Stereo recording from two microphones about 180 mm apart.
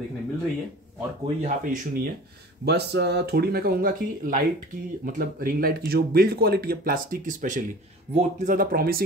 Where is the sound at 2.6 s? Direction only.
65° right (ahead or behind).